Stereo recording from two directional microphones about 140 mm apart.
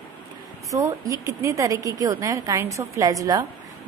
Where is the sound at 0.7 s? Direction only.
25° right (ahead or behind).